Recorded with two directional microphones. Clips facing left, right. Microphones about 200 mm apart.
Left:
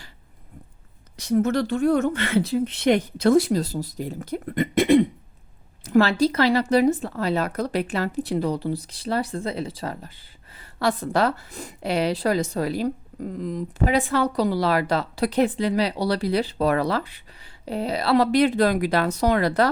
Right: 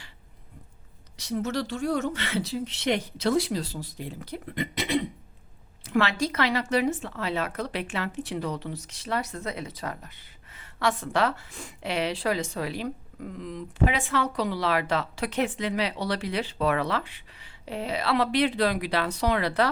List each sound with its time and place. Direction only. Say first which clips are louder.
1.1 s speech: left 8 dB; 50° left (ahead or behind)
5.8 s a woman's voice: left 7 dB; 40° left (ahead or behind)